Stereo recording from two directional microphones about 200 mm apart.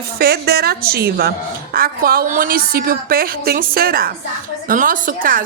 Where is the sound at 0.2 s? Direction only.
50° right (ahead or behind).